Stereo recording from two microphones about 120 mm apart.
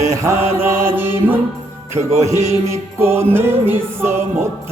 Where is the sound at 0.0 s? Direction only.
25° right (ahead or behind).